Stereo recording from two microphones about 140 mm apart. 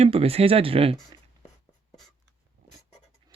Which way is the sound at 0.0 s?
45° right (ahead or behind).